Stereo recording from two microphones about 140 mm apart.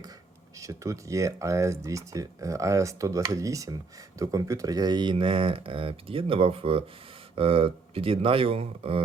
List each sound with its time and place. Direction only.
0.6 s speech: 20° right (ahead or behind); by 9.0 s 40° right (ahead or behind)